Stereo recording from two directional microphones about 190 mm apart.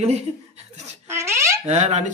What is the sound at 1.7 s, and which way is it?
Speech, 35° right (ahead or behind).